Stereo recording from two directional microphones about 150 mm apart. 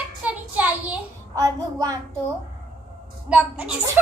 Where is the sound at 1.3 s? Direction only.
20° right (ahead or behind).